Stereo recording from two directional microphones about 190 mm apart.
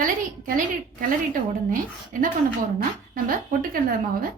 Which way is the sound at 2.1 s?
45° right (ahead or behind).